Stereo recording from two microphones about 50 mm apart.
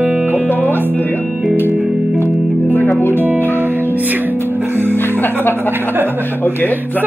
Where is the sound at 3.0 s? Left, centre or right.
Left.